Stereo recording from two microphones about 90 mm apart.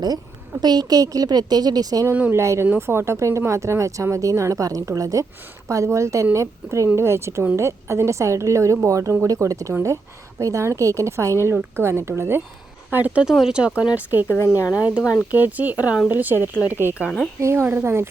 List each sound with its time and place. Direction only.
0.6 s speech: 50° right (ahead or behind)
2.3 s speech: 30° right (ahead or behind)
13.2 s speech: 5° right (ahead or behind)
14.3 s a woman's voice: 30° left (ahead or behind)
14.8 s speech: 15° right (ahead or behind)